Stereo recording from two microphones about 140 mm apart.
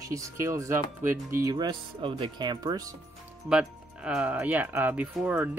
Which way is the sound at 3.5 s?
5° right (ahead or behind).